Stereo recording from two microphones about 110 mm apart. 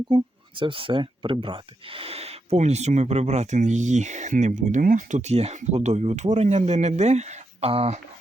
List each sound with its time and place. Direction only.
0.1 s speech: 45° right (ahead or behind); by 7.9 s 70° right (ahead or behind)